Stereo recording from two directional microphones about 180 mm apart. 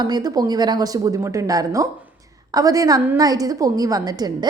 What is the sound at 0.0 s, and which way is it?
A woman's voice, 20° right (ahead or behind).